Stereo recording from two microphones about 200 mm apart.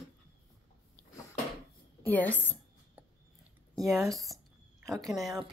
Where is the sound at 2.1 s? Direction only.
10° left (ahead or behind).